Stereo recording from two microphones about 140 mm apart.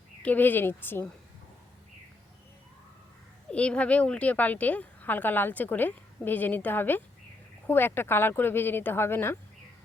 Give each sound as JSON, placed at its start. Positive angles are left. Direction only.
{"t": 0.2, "sound": "a woman's voice", "side_deg": 10}
{"t": 3.5, "sound": "a woman's voice", "side_deg": 10}